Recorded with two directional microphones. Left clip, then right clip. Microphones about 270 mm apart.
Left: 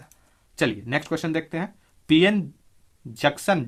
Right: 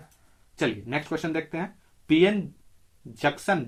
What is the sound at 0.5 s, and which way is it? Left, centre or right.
Speech, left.